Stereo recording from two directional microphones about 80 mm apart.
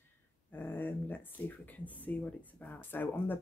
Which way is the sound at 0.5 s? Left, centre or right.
Left.